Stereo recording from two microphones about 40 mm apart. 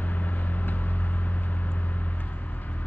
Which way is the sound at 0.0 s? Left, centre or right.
Left.